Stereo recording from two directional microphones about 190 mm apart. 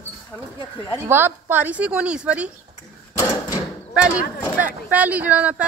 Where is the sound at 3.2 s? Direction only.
15° left (ahead or behind).